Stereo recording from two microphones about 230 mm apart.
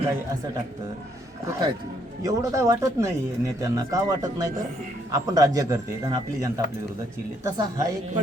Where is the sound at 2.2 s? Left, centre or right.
Centre.